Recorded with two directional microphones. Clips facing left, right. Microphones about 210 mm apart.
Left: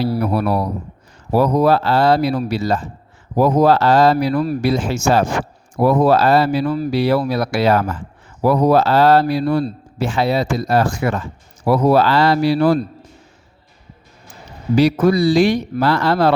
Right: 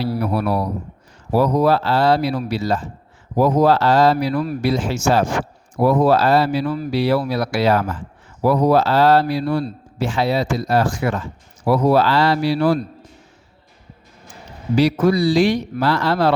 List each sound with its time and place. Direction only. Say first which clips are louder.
0.0 s a man's voice: left 2 dB; 45° left (ahead or behind)
14.8 s a man's voice: left 2 dB; 50° left (ahead or behind)